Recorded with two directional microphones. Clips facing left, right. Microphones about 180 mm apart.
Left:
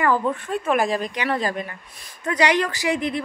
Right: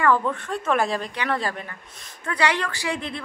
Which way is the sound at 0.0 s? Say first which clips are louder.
Even; 15° left (ahead or behind).